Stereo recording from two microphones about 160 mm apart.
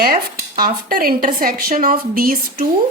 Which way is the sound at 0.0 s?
65° right (ahead or behind).